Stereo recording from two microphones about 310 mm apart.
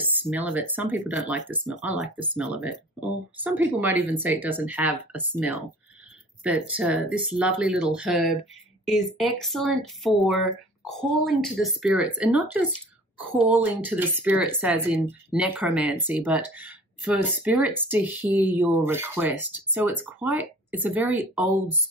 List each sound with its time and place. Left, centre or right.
0.0 s speech: centre